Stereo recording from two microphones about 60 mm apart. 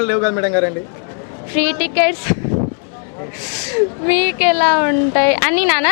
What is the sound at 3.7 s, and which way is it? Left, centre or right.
A woman's voice, centre.